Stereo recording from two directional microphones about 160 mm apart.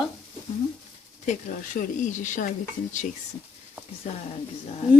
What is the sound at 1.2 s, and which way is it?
Speech, 50° left (ahead or behind).